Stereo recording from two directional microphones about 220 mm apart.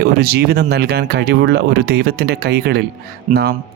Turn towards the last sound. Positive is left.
turn(degrees=-35)  # may be behind; listen again after turning